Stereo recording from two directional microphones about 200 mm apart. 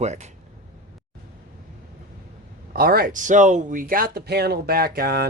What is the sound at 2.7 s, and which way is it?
Speech, 50° right (ahead or behind).